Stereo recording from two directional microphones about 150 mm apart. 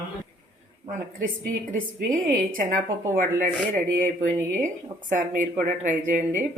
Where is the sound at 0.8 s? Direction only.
60° right (ahead or behind).